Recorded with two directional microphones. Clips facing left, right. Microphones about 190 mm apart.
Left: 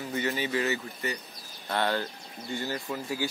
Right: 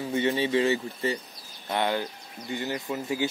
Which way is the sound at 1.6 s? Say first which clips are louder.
Right 2 dB; 15° right (ahead or behind).